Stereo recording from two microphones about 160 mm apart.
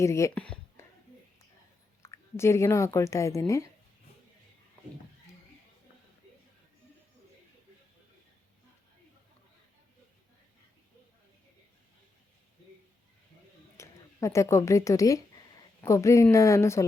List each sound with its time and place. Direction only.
0.0 s speech: 15° left (ahead or behind)
0.3 s a sound: 5° left (ahead or behind)
2.0 s a woman's voice: 15° left (ahead or behind)
13.7 s a woman's voice: 20° left (ahead or behind)